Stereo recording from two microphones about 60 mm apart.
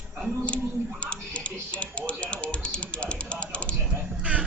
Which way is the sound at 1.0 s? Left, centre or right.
Left.